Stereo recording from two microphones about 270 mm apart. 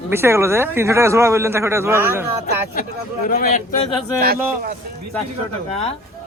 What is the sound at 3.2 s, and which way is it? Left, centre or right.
Speech, left.